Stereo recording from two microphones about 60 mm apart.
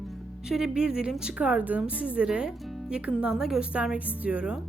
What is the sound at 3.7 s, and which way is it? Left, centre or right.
Speech, right.